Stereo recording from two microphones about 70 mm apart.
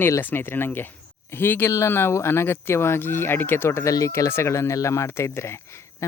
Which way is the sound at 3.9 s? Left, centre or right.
Left.